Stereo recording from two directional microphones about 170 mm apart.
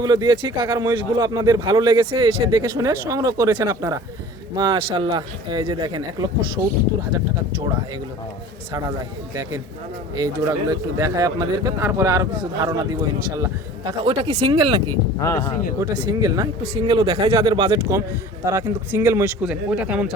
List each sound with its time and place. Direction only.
0.0 s a man's voice: 25° right (ahead or behind)
9.3 s a man's voice: 20° right (ahead or behind)
14.0 s speech: 35° right (ahead or behind)
15.2 s speech: 20° left (ahead or behind)
15.8 s a man's voice: 25° right (ahead or behind)
18.4 s speech: 15° right (ahead or behind)